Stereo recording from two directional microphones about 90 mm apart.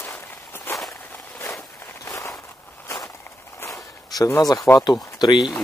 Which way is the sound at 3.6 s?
35° left (ahead or behind).